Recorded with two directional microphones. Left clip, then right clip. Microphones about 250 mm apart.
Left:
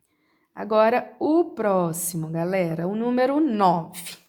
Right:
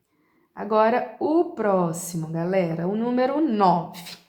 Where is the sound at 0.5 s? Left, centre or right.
Left.